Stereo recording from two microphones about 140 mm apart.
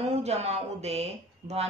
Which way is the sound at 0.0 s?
50° right (ahead or behind).